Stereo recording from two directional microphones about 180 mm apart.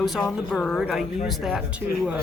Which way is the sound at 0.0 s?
Centre (ahead or behind).